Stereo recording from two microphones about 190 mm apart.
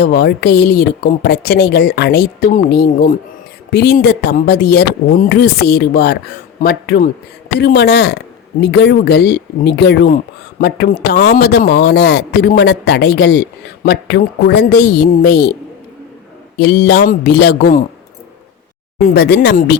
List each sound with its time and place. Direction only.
0.0 s speech: 55° left (ahead or behind)
16.6 s speech: 65° left (ahead or behind)
19.1 s speech: 65° left (ahead or behind)